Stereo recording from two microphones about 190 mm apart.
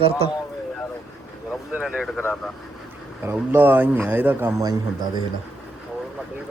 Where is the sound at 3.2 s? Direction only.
10° right (ahead or behind).